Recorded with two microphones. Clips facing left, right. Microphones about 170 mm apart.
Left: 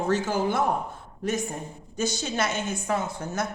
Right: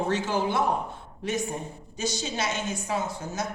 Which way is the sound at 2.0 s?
50° left (ahead or behind).